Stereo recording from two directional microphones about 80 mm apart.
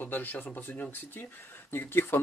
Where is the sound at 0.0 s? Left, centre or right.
Left.